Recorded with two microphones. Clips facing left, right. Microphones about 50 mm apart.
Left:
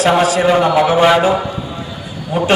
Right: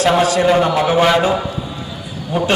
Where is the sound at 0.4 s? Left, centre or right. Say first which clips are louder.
Left 2 dB; centre.